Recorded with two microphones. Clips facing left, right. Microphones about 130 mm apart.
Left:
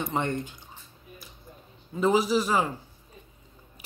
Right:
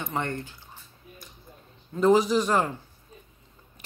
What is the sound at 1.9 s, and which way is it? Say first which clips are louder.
Speech: right 3 dB; 5° left (ahead or behind).